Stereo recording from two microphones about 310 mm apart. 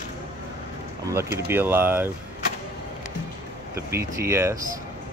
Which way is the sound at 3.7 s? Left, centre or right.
Centre.